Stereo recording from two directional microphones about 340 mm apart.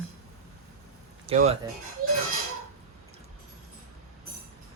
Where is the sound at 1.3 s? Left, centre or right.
Centre.